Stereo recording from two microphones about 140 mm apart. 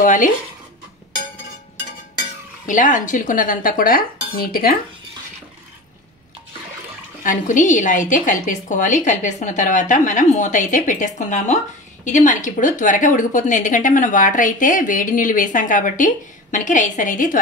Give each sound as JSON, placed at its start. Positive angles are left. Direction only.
{"t": 0.0, "sound": "a woman's voice", "side_deg": 70}
{"t": 2.6, "sound": "a woman's voice", "side_deg": 65}
{"t": 7.2, "sound": "a woman's voice", "side_deg": 65}